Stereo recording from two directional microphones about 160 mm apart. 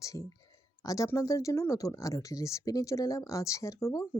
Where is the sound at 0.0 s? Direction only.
20° left (ahead or behind).